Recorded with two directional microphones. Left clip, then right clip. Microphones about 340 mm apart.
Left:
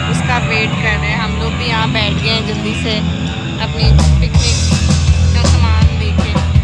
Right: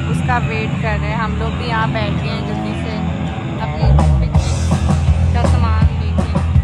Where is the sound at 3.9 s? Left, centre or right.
Right.